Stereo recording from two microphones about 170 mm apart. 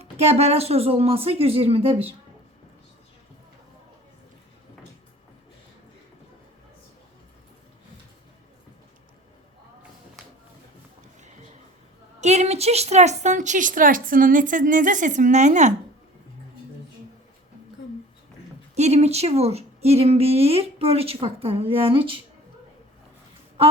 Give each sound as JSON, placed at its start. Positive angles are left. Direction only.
{"t": 0.0, "sound": "a woman's voice", "side_deg": -40}
{"t": 12.2, "sound": "a woman's voice", "side_deg": -40}
{"t": 18.7, "sound": "a woman's voice", "side_deg": -40}